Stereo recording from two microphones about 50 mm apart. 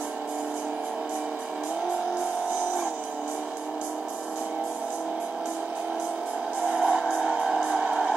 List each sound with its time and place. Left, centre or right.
6.6 s music: centre